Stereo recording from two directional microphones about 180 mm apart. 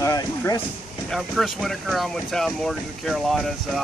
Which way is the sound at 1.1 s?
Centre (ahead or behind).